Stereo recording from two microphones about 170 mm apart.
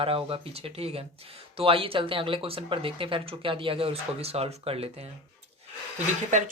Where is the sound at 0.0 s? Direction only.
35° right (ahead or behind).